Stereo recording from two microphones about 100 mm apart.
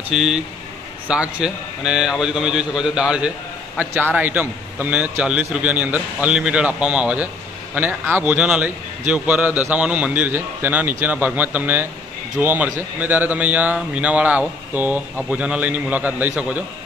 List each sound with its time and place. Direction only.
0.1 s a man's voice: 5° right (ahead or behind)
3.7 s a man's voice: 20° right (ahead or behind)